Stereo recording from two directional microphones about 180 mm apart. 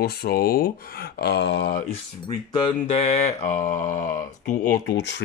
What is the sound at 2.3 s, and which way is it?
Speech, 25° left (ahead or behind).